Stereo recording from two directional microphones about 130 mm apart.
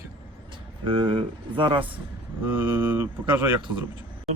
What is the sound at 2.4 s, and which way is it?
A man's voice, 15° right (ahead or behind).